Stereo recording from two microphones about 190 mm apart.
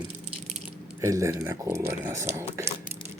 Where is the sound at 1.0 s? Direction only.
15° right (ahead or behind).